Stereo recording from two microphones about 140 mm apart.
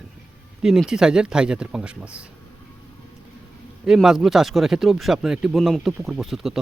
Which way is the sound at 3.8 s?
5° right (ahead or behind).